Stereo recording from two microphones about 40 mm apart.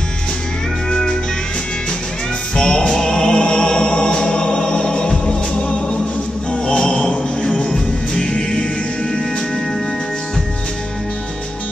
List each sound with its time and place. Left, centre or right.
0.8 s music: left
2.5 s music: centre
7.5 s music: centre